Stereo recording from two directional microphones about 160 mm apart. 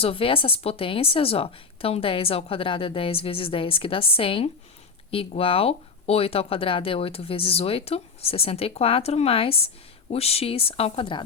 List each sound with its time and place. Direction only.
0.0 s a woman's voice: 35° left (ahead or behind)